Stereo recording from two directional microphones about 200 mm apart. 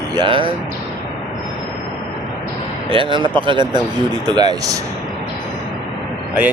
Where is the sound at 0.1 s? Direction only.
25° right (ahead or behind).